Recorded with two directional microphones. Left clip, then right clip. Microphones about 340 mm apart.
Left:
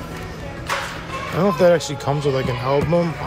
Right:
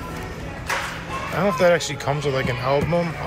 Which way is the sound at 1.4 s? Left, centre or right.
Centre.